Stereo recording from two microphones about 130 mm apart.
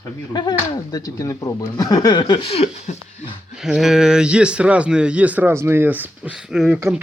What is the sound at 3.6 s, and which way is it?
Speech, 5° right (ahead or behind).